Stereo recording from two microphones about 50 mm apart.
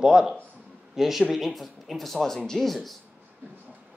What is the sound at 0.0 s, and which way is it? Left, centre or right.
Speech, centre.